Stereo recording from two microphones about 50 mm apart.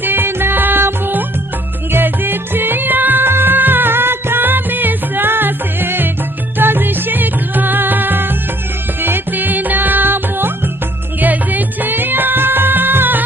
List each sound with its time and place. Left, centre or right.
0.0 s music: right